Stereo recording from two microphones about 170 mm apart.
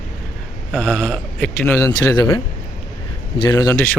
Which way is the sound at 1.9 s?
20° left (ahead or behind).